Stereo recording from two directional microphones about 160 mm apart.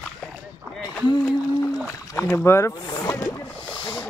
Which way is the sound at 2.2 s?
15° left (ahead or behind).